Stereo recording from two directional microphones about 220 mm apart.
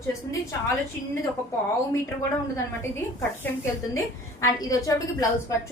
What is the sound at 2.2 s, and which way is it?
Speech, 15° left (ahead or behind).